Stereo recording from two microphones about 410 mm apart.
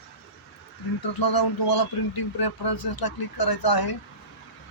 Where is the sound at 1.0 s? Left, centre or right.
Left.